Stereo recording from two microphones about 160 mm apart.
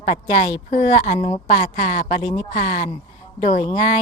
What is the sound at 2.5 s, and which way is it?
Speech, 50° left (ahead or behind).